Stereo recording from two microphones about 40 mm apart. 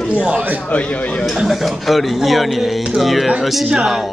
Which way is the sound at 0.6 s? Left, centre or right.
Left.